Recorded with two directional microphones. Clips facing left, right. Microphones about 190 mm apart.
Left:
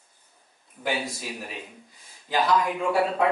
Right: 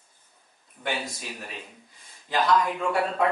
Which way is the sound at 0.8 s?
5° left (ahead or behind).